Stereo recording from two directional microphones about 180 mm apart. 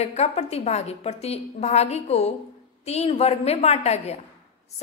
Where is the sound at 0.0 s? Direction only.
35° left (ahead or behind).